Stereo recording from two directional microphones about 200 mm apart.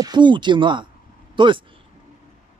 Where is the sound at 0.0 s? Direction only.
20° right (ahead or behind).